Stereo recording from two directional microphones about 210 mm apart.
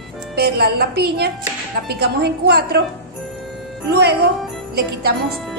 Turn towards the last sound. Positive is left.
turn(degrees=-50)  # may be behind; listen again after turning